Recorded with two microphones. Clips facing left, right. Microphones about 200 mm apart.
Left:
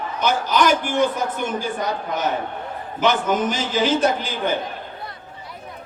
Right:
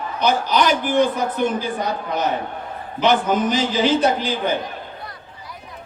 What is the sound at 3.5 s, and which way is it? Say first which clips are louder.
Speech: right 2 dB; 50° left (ahead or behind).